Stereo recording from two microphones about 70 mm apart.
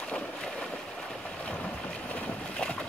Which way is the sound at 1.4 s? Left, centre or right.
Centre.